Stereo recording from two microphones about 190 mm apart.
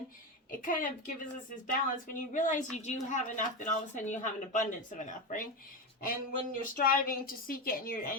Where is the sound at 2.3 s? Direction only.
40° left (ahead or behind).